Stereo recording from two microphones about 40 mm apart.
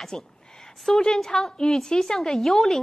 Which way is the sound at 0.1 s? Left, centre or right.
Left.